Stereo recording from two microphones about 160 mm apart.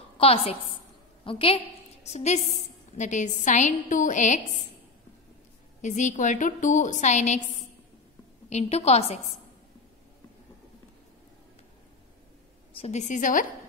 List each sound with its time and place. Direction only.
0.2 s a woman's voice: 40° left (ahead or behind)
5.8 s a woman's voice: 50° left (ahead or behind)
8.5 s a woman's voice: 40° left (ahead or behind)
12.7 s a woman's voice: 45° left (ahead or behind)